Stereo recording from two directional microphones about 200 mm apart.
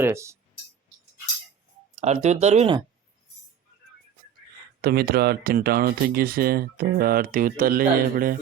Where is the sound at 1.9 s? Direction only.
35° right (ahead or behind).